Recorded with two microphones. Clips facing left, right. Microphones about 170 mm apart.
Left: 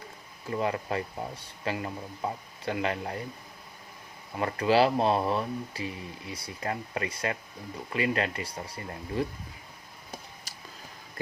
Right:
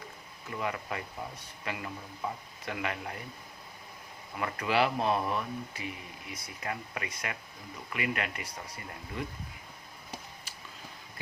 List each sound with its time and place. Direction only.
0.5 s speech: 30° left (ahead or behind)
4.4 s speech: 30° left (ahead or behind)